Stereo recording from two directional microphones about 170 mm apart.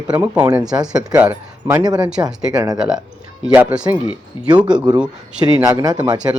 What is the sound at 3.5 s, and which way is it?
Speech, 5° right (ahead or behind).